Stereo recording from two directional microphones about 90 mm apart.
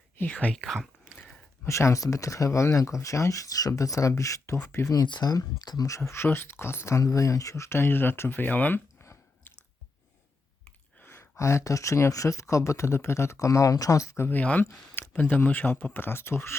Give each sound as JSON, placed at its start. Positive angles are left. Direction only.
{"t": 0.2, "sound": "speech", "side_deg": 15}
{"t": 0.5, "sound": "speech", "side_deg": 0}
{"t": 1.2, "sound": "speech", "side_deg": 30}
{"t": 5.0, "sound": "speech", "side_deg": 50}
{"t": 6.0, "sound": "speech", "side_deg": 25}
{"t": 11.0, "sound": "speech", "side_deg": 25}
{"t": 14.3, "sound": "speech", "side_deg": 15}